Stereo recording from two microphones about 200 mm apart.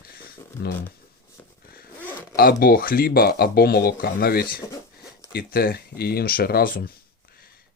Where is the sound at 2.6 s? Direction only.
45° left (ahead or behind).